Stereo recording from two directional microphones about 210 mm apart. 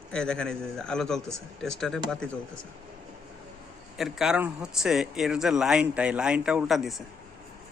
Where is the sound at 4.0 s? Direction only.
Centre (ahead or behind).